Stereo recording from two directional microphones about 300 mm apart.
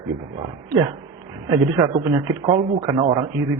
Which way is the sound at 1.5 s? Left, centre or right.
Centre.